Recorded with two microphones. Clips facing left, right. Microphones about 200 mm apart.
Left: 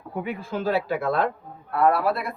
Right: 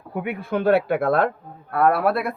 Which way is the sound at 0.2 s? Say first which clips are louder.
Right 4 dB; 65° right (ahead or behind).